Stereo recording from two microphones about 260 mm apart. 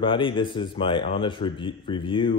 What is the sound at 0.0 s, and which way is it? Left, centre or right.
A man's voice, centre.